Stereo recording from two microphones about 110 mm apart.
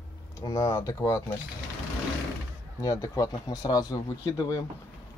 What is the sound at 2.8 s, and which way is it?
Speech, 30° left (ahead or behind).